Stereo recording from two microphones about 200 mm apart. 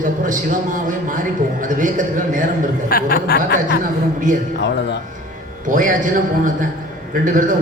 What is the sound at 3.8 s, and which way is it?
Speech, 40° right (ahead or behind).